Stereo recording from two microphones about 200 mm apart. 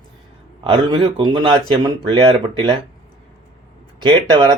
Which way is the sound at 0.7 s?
25° right (ahead or behind).